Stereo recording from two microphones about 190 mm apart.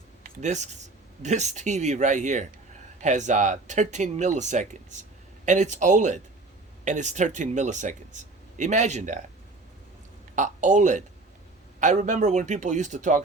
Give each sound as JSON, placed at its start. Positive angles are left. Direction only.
{"t": 0.2, "sound": "speech", "side_deg": -40}
{"t": 10.3, "sound": "speech", "side_deg": -40}